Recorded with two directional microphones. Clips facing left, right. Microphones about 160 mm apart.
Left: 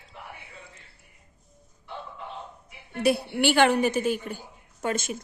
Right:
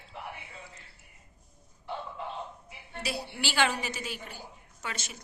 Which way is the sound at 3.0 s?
55° left (ahead or behind).